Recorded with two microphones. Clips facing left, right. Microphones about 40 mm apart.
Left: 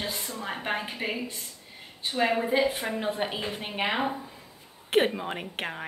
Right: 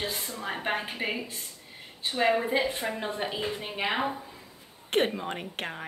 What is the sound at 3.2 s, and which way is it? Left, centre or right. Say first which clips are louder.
Speech: left 1 dB; left.